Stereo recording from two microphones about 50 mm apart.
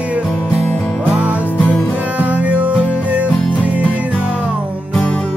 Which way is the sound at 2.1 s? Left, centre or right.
Right.